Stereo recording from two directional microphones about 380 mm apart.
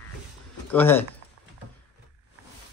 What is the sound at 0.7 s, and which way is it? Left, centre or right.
Speech, centre.